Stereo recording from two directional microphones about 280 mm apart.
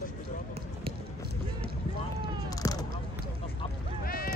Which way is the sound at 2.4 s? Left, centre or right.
Centre.